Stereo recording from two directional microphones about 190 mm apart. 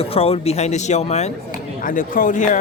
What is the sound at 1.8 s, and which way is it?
Speech, 45° left (ahead or behind).